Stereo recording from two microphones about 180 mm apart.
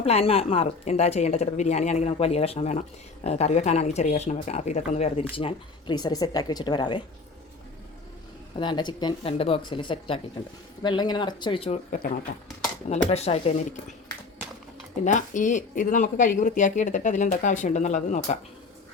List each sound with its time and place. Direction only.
0.0 s a woman's voice: 35° left (ahead or behind)
8.5 s a woman's voice: 25° left (ahead or behind)
13.1 s a woman's voice: 35° left (ahead or behind)
15.0 s speech: 45° left (ahead or behind)